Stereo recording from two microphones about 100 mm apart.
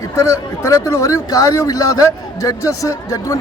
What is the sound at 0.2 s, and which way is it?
A man's voice, 30° left (ahead or behind).